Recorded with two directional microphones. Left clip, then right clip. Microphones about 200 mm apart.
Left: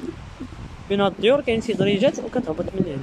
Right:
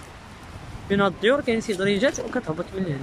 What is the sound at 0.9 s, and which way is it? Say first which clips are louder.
Speech: left 2 dB; 5° left (ahead or behind).